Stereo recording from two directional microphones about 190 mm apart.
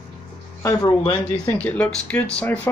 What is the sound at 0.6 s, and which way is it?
Speech, 20° left (ahead or behind).